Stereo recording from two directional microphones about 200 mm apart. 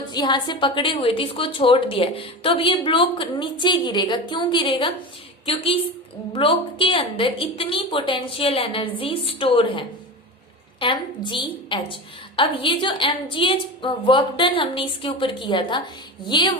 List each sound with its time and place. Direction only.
0.1 s a woman's voice: 20° left (ahead or behind)